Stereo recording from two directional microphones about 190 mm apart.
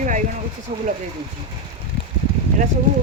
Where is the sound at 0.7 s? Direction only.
30° right (ahead or behind).